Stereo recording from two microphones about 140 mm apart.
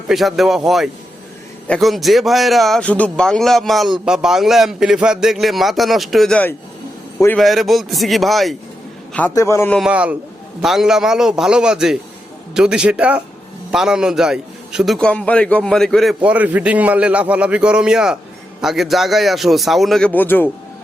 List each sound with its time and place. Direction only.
0.1 s a man's voice: centre (ahead or behind)
9.3 s a man's voice: 20° left (ahead or behind)
9.7 s a man's voice: 5° right (ahead or behind)
16.2 s a man's voice: 10° right (ahead or behind); by 20.5 s 15° left (ahead or behind)